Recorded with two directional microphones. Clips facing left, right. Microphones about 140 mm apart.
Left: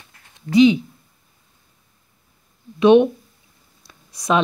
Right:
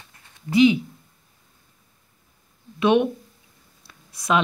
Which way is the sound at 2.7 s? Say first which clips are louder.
Left 6 dB; 20° left (ahead or behind).